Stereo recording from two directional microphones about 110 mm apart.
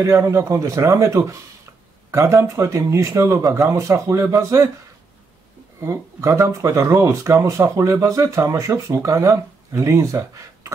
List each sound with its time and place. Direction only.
0.0 s speech: 25° right (ahead or behind)
5.9 s speech: 30° right (ahead or behind)